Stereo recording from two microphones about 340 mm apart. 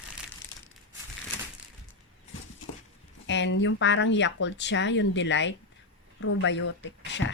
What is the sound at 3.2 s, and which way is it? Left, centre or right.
Speech, left.